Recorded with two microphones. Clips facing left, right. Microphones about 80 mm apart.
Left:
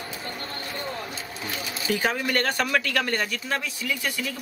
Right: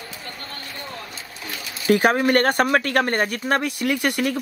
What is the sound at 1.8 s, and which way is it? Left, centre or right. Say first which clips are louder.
Speech: right 9 dB; right.